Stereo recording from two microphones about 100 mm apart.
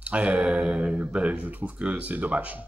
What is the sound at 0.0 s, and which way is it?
Speech, 15° right (ahead or behind).